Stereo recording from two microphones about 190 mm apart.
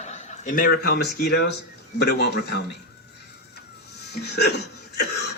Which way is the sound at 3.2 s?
60° left (ahead or behind).